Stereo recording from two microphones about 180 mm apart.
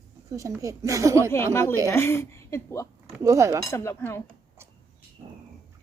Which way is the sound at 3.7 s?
15° left (ahead or behind).